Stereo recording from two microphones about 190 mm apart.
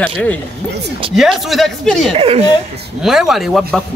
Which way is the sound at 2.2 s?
30° right (ahead or behind).